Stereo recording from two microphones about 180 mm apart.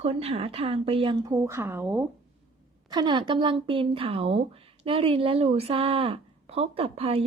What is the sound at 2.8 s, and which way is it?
Speech, 25° right (ahead or behind).